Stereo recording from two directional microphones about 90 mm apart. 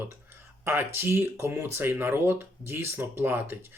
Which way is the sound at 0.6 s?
30° right (ahead or behind).